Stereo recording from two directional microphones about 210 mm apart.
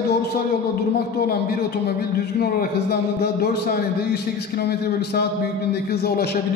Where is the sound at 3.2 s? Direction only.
50° left (ahead or behind).